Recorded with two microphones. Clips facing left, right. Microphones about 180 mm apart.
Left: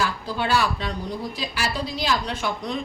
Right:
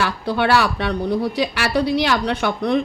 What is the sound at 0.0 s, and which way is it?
A woman's voice, 70° right (ahead or behind).